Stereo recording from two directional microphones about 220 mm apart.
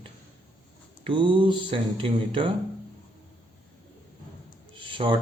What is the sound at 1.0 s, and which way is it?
A man's voice, 25° right (ahead or behind).